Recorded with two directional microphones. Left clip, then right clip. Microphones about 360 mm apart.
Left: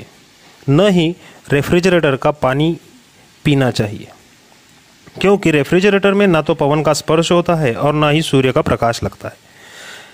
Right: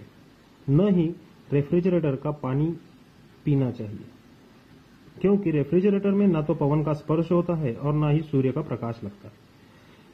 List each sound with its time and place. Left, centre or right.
0.7 s a man's voice: left
5.2 s a man's voice: left